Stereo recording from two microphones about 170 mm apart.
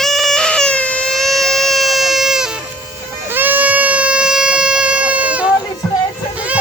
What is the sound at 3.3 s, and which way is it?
Goat, 10° right (ahead or behind).